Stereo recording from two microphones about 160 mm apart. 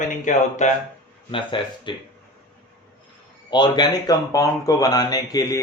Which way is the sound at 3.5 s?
25° left (ahead or behind).